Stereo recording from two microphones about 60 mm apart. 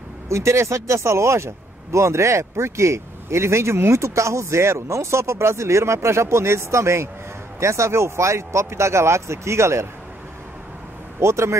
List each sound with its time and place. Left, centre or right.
0.3 s speech: right
11.1 s speech: right